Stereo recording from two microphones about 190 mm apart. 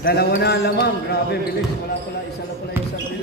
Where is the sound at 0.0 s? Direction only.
55° left (ahead or behind).